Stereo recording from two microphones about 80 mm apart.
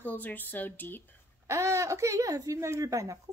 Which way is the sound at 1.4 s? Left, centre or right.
Right.